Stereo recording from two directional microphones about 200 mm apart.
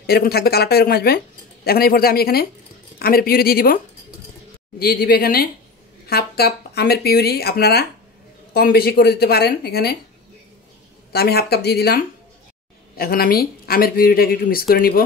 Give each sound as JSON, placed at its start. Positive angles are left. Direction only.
{"t": 0.0, "sound": "speech", "side_deg": 50}
{"t": 11.1, "sound": "speech", "side_deg": 50}